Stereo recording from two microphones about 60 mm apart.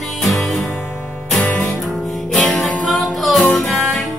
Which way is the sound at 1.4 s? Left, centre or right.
Left.